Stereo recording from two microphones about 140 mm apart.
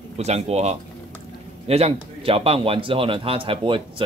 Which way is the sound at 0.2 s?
50° right (ahead or behind).